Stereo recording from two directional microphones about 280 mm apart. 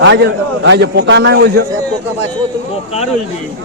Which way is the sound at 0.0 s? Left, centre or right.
Right.